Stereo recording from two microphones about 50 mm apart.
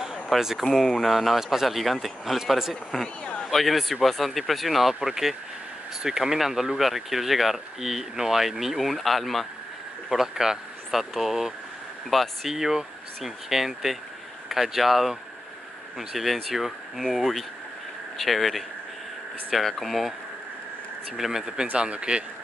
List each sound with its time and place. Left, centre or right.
0.0 s a sound: centre
0.7 s speech: centre
21.2 s speech: centre